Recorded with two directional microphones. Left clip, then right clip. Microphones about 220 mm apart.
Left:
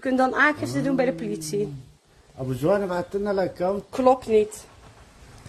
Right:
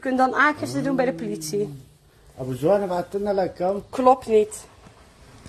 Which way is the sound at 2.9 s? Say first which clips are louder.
Right 1 dB; 20° left (ahead or behind).